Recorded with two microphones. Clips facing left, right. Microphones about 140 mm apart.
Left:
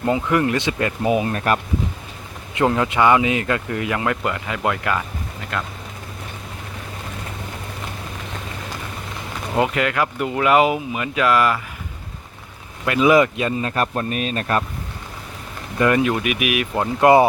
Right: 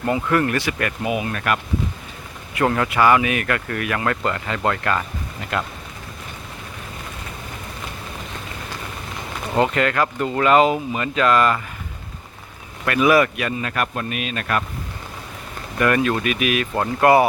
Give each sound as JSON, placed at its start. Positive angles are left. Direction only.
{"t": 0.0, "sound": "speech", "side_deg": 20}
{"t": 1.0, "sound": "speech", "side_deg": 35}
{"t": 2.6, "sound": "speech", "side_deg": 20}
{"t": 5.5, "sound": "speech", "side_deg": -5}
{"t": 9.6, "sound": "speech", "side_deg": 10}
{"t": 12.8, "sound": "speech", "side_deg": 20}
{"t": 15.8, "sound": "speech", "side_deg": 20}